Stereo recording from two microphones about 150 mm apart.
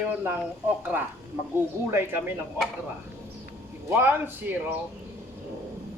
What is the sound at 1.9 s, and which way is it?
Speech, 15° right (ahead or behind).